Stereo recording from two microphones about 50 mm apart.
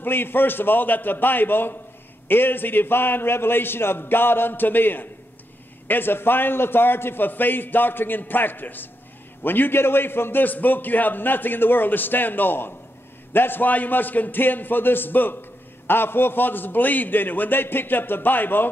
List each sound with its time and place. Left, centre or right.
0.0 s a man's voice: left